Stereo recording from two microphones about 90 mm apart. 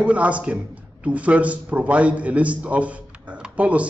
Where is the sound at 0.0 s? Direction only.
15° right (ahead or behind).